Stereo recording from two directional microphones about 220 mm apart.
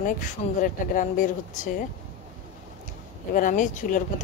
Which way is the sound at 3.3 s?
35° left (ahead or behind).